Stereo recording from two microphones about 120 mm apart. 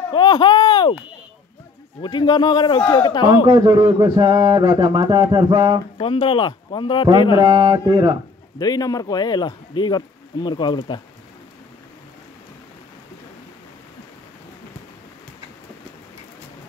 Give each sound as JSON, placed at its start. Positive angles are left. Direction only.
{"t": 0.1, "sound": "speech", "side_deg": 40}
{"t": 2.0, "sound": "speech", "side_deg": 35}
{"t": 3.4, "sound": "speech", "side_deg": -35}
{"t": 5.9, "sound": "speech", "side_deg": 45}
{"t": 7.3, "sound": "speech", "side_deg": -40}
{"t": 8.5, "sound": "speech", "side_deg": 30}